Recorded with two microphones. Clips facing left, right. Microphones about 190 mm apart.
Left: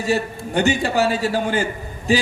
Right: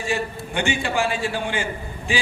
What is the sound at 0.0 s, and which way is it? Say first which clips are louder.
A man's voice: left 4 dB; 40° left (ahead or behind).